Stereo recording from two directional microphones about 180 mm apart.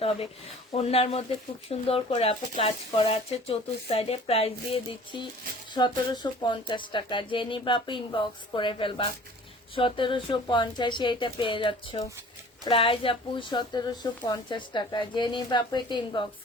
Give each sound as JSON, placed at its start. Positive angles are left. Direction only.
{"t": 0.0, "sound": "speech", "side_deg": 30}